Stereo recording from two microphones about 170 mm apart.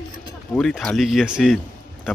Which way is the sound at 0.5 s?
5° left (ahead or behind).